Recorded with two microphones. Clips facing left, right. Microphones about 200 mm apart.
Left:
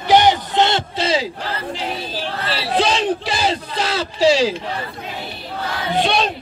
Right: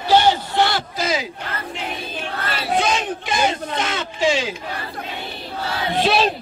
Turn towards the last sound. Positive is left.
turn(degrees=0)  # may be behind; listen again after turning